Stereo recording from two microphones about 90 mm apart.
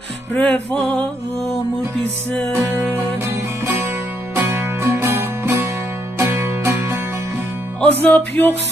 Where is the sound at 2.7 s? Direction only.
25° right (ahead or behind).